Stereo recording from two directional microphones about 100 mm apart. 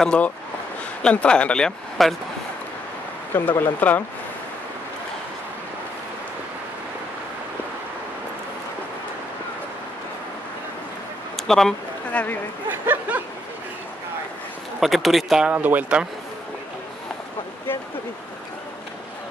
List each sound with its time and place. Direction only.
0.0 s speech: 10° left (ahead or behind)
3.3 s speech: 20° left (ahead or behind)
11.3 s a sound: 5° left (ahead or behind)
12.1 s speech: 15° left (ahead or behind)
12.6 s speech: 20° right (ahead or behind)
14.8 s speech: centre (ahead or behind)
15.5 s speech: 15° right (ahead or behind)